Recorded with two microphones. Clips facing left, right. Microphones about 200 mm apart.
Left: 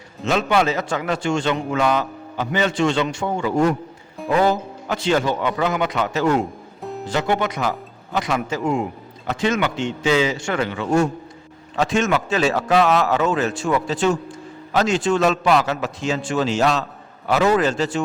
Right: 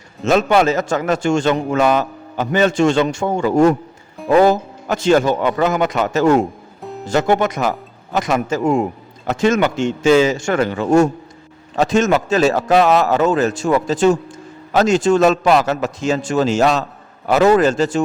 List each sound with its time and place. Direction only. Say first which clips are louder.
0.3 s a man's voice: right 5 dB; 45° right (ahead or behind)